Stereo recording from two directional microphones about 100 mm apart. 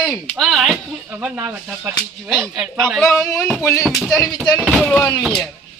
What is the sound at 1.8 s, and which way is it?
Speech, 20° right (ahead or behind).